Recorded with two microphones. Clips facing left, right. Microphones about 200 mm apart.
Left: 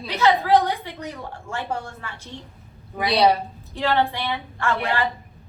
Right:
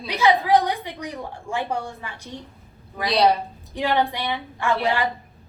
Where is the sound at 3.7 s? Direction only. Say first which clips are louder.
Even; 15° right (ahead or behind).